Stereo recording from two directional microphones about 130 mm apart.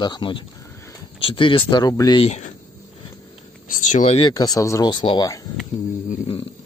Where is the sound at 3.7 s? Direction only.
75° left (ahead or behind).